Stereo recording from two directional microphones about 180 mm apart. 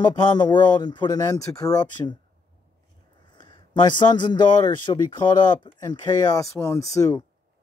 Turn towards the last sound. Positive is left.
turn(degrees=20)  # may be behind; listen again after turning